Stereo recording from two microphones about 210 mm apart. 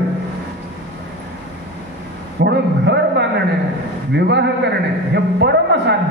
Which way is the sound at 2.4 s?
55° right (ahead or behind).